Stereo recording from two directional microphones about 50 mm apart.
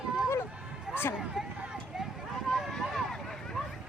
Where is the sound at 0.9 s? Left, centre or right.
Centre.